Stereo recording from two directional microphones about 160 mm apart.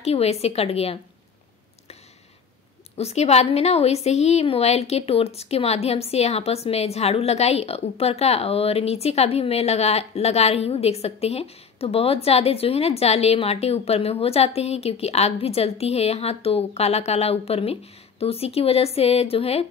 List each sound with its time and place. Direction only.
0.0 s a woman's voice: 40° left (ahead or behind)
3.0 s a woman's voice: 40° left (ahead or behind)